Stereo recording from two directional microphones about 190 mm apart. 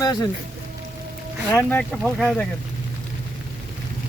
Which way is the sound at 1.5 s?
5° left (ahead or behind).